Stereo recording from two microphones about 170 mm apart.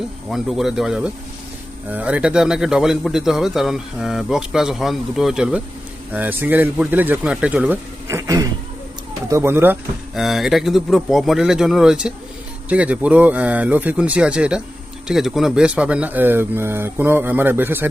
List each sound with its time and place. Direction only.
0.3 s a man's voice: centre (ahead or behind)
8.0 s insect: 20° right (ahead or behind)
9.3 s speech: 15° right (ahead or behind)
10.2 s a man's voice: centre (ahead or behind)